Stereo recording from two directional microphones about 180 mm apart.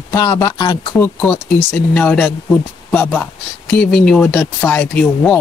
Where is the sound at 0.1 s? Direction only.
15° left (ahead or behind).